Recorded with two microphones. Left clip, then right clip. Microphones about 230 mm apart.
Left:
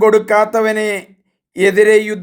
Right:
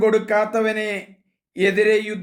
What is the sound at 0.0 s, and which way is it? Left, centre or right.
Speech, left.